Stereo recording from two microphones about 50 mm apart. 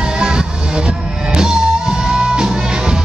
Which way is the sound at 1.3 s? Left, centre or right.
Centre.